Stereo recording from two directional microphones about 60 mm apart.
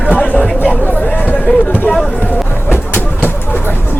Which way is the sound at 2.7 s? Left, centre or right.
Left.